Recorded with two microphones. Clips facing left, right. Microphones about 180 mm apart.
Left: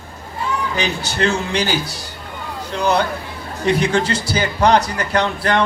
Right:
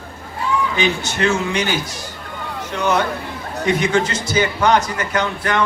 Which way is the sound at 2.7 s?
35° left (ahead or behind).